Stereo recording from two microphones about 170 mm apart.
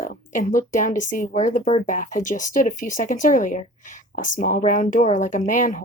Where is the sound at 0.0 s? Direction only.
50° left (ahead or behind).